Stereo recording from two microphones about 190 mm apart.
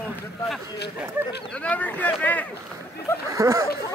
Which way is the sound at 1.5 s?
10° left (ahead or behind).